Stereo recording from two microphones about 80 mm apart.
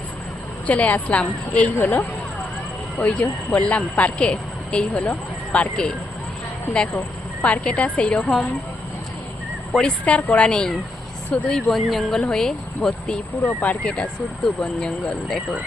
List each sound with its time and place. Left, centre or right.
0.7 s a woman's voice: centre
3.0 s a woman's voice: centre
7.4 s a woman's voice: centre
9.7 s a woman's voice: centre
11.7 s a woman's voice: centre
13.4 s a woman's voice: centre